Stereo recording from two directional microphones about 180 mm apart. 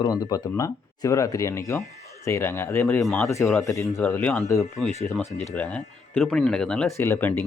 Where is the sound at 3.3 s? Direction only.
15° left (ahead or behind).